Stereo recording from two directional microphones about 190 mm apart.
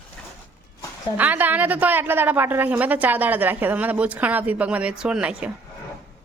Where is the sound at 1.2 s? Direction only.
10° right (ahead or behind).